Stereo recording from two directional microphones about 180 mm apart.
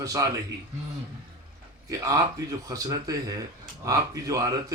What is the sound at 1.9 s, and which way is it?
Speech, 20° right (ahead or behind).